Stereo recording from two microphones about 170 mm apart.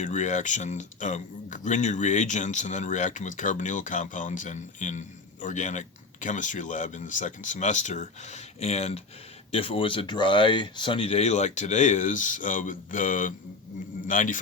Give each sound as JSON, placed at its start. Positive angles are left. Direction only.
{"t": 0.0, "sound": "speech", "side_deg": 45}